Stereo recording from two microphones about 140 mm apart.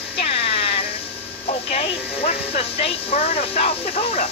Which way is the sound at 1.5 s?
50° left (ahead or behind).